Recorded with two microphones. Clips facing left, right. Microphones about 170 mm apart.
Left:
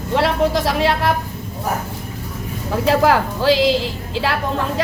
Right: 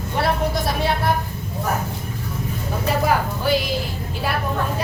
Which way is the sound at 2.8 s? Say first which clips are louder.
Left 5 dB; 90° left.